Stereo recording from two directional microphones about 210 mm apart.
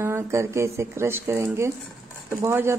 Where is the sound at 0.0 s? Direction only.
15° right (ahead or behind).